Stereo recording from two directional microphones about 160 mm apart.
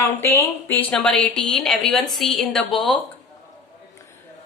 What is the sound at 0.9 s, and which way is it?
A woman's voice, 5° left (ahead or behind).